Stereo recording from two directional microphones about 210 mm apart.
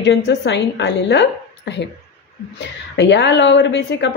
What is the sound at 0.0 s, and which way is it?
A woman's voice, 55° left (ahead or behind).